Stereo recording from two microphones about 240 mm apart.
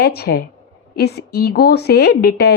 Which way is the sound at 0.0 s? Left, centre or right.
Left.